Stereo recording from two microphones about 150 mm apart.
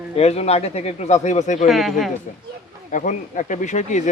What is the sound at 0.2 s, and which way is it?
Speech, 45° left (ahead or behind).